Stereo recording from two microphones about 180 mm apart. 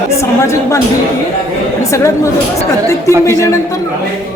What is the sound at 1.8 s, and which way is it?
Speech, 15° left (ahead or behind).